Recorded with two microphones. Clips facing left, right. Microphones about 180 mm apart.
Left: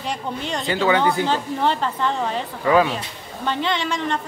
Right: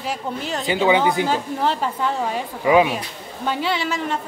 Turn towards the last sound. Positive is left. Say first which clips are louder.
# even
turn(degrees=-5)  # may be behind; listen again after turning